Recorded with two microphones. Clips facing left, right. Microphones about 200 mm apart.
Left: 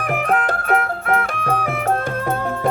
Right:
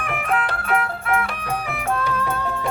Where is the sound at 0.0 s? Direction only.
40° left (ahead or behind).